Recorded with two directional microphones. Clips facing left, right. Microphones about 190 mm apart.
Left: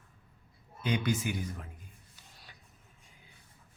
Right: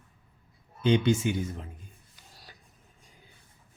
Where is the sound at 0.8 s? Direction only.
25° right (ahead or behind).